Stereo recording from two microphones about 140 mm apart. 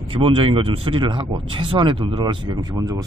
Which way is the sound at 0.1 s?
40° right (ahead or behind).